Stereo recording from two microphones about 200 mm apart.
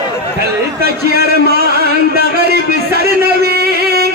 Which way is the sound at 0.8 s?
50° right (ahead or behind).